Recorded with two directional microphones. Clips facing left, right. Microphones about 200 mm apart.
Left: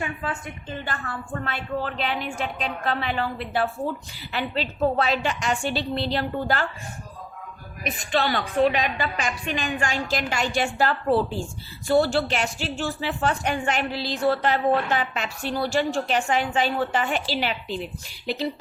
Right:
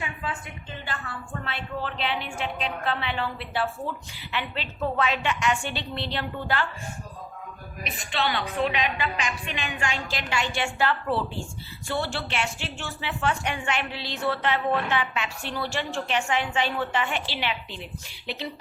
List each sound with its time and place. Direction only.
0.0 s a woman's voice: 45° left (ahead or behind)
7.9 s a woman's voice: 45° left (ahead or behind)